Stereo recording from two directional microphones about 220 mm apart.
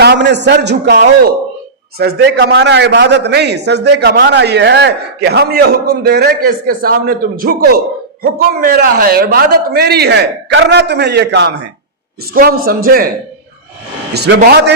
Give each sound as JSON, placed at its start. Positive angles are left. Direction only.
{"t": 0.0, "sound": "a man's voice", "side_deg": -50}
{"t": 14.1, "sound": "a man's voice", "side_deg": -45}